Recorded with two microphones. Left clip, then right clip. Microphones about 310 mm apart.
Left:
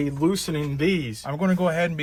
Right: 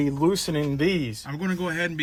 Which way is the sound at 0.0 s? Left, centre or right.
Right.